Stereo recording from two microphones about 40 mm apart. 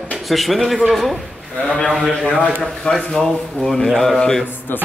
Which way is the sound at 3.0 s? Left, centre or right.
Centre.